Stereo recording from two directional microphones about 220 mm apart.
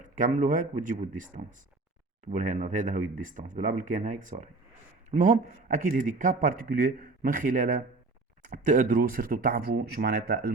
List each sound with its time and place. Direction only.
0.0 s a man's voice: 35° right (ahead or behind)